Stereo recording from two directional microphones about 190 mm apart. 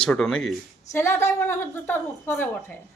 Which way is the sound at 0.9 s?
15° left (ahead or behind).